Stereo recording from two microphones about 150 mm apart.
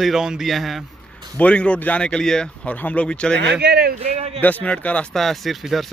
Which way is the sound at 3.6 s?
90° right.